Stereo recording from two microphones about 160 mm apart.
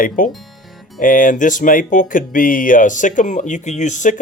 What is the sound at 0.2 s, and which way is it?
Speech, 55° left (ahead or behind).